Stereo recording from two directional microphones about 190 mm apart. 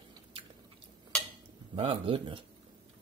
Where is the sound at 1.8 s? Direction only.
30° right (ahead or behind).